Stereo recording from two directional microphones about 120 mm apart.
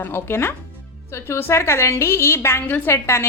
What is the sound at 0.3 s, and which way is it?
A woman's voice, 20° left (ahead or behind).